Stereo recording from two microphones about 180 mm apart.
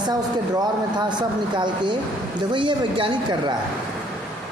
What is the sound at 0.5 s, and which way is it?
A woman's voice, 25° right (ahead or behind).